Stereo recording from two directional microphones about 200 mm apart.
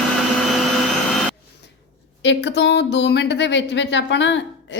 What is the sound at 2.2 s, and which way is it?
Speech, 60° left (ahead or behind).